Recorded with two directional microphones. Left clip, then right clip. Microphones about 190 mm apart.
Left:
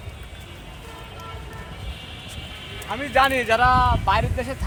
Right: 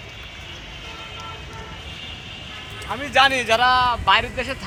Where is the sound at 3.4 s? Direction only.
50° left (ahead or behind); by 4.5 s 70° left (ahead or behind).